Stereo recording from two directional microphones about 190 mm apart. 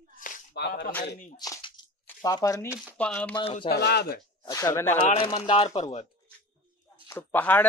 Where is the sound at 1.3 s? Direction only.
20° left (ahead or behind).